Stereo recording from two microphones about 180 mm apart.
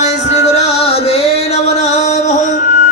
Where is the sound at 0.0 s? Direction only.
40° left (ahead or behind).